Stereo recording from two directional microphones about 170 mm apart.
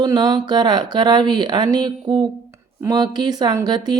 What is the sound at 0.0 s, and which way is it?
Speech, 25° right (ahead or behind).